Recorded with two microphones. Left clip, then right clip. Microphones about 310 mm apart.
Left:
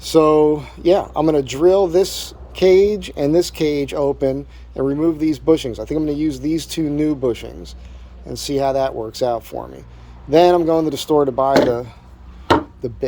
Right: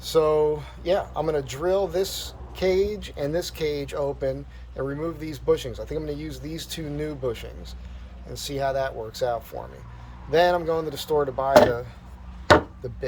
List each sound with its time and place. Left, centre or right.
0.0 s speech: left